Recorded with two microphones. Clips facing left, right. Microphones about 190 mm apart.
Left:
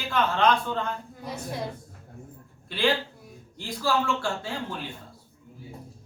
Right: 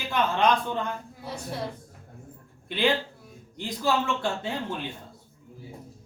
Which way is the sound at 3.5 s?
20° right (ahead or behind).